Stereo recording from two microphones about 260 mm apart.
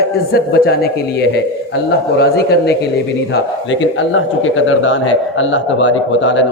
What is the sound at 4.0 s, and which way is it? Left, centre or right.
Speech, left.